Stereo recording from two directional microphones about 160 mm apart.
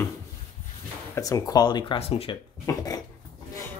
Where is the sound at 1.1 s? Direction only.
20° left (ahead or behind); by 2.3 s 40° left (ahead or behind).